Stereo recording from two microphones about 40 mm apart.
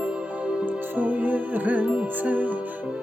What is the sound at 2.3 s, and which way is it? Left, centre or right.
Speech, right.